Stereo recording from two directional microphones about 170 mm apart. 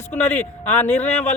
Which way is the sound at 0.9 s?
40° left (ahead or behind).